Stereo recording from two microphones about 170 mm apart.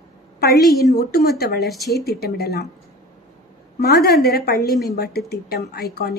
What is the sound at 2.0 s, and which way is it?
Speech, 70° left (ahead or behind).